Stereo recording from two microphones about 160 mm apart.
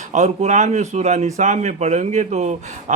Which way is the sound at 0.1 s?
45° right (ahead or behind).